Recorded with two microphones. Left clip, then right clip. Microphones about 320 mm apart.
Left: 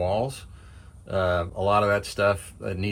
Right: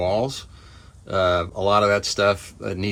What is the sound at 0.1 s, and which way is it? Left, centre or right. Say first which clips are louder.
Speech: right 4 dB; centre.